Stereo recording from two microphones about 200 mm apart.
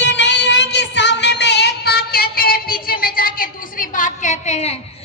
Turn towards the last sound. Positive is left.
turn(degrees=35)  # may be behind; listen again after turning